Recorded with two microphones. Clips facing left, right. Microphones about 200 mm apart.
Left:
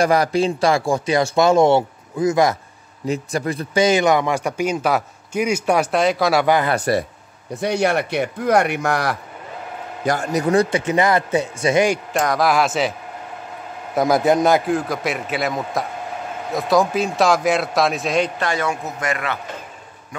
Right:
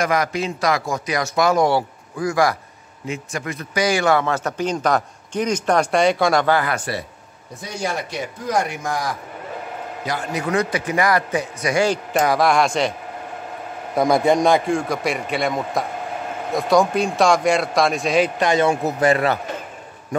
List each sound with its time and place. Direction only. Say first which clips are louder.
0.0 s a man's voice: left 4 dB; 30° left (ahead or behind)
3.1 s speech: left 5 dB; 35° left (ahead or behind); by 6.4 s centre (ahead or behind)
6.4 s speech: left 2 dB; 15° left (ahead or behind)
6.7 s speech: left 6 dB; 45° left (ahead or behind)
7.6 s a man's voice: left 7 dB; 65° left (ahead or behind)
10.0 s a man's voice: left 6 dB; 45° left (ahead or behind); by 11.9 s 25° left (ahead or behind)
12.1 s a man's voice: right 1 dB; centre (ahead or behind)
13.9 s a man's voice: even; 5° left (ahead or behind)
18.4 s a man's voice: right 5 dB; 20° right (ahead or behind)
18.7 s a man's voice: right 7 dB; 30° right (ahead or behind)